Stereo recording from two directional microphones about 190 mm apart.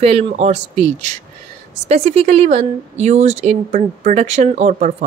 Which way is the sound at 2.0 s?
40° right (ahead or behind).